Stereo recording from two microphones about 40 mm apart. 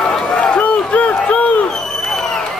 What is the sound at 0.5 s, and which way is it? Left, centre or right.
Crowd, left.